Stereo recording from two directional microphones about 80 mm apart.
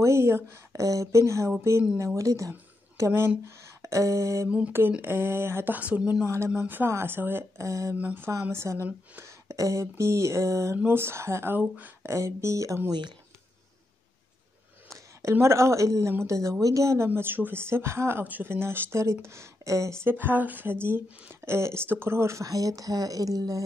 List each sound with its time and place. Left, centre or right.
0.0 s a woman's voice: right
4.5 s speech: centre
5.0 s speech: right
5.8 s speech: centre
6.8 s speech: right
7.5 s a woman's voice: right
7.9 s speech: right
8.5 s a woman's voice: right
12.1 s a woman's voice: right
14.9 s a woman's voice: right